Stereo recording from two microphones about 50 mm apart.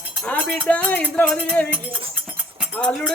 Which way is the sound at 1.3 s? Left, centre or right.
Left.